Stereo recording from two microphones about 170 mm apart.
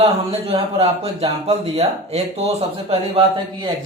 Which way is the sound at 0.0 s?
35° right (ahead or behind).